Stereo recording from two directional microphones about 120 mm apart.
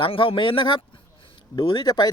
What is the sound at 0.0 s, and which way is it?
Speech, 45° left (ahead or behind).